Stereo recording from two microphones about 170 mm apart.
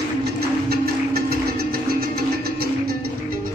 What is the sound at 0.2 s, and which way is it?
Music, 65° right (ahead or behind).